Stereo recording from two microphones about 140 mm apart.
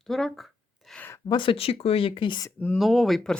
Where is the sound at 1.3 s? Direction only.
40° left (ahead or behind).